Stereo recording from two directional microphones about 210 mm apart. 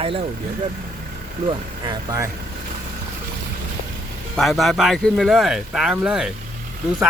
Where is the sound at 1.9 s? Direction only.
15° right (ahead or behind).